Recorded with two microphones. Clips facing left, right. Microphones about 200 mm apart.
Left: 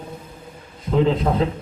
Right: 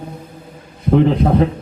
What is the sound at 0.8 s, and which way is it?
Speech, 60° right (ahead or behind).